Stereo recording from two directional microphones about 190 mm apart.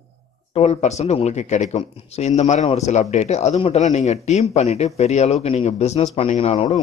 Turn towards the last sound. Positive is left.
turn(degrees=30)  # may be behind; listen again after turning